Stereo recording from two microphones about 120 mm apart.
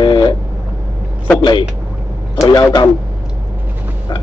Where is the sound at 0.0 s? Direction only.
40° left (ahead or behind).